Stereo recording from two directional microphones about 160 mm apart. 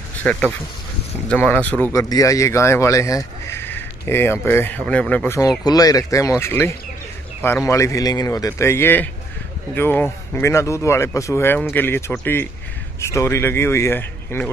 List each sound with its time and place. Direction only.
0.2 s speech: 10° left (ahead or behind)
5.6 s speech: 25° left (ahead or behind)
13.0 s speech: 20° left (ahead or behind)